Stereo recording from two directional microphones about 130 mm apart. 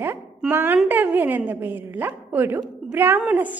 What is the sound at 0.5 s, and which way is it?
A woman's voice, 15° right (ahead or behind).